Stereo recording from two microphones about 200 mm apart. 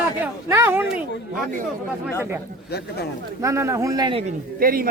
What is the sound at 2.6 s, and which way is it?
Speech, 55° left (ahead or behind).